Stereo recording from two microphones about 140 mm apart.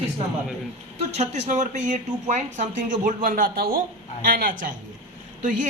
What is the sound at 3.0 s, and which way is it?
A man's voice, 80° right.